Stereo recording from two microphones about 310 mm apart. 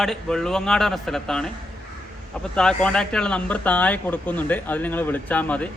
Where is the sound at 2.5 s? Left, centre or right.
Centre.